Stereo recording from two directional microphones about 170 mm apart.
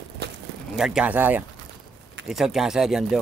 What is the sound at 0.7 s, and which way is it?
Speech, 5° right (ahead or behind).